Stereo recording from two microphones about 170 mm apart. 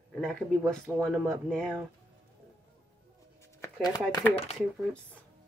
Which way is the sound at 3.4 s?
20° left (ahead or behind).